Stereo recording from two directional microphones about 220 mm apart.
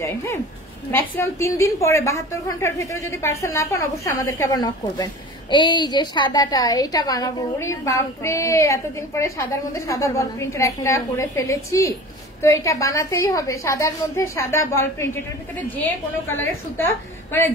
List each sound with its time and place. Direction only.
0.0 s a woman's voice: 10° left (ahead or behind)
16.3 s a woman's voice: 10° left (ahead or behind)